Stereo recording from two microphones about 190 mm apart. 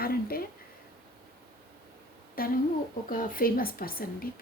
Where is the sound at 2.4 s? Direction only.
50° left (ahead or behind).